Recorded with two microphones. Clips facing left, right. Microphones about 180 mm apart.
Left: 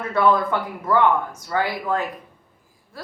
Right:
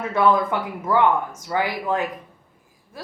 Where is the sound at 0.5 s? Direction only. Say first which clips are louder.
Even; 15° right (ahead or behind).